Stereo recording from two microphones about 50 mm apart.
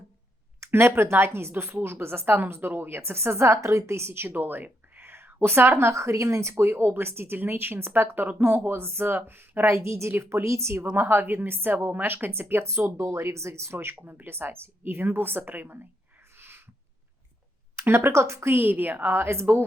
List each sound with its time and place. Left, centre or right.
0.7 s a woman's voice: right
6.5 s a woman's voice: right
9.7 s a woman's voice: right
10.4 s speech: right
10.9 s a woman's voice: right
12.6 s speech: right
14.0 s a woman's voice: right
16.4 s a sound: right
17.7 s a woman's voice: right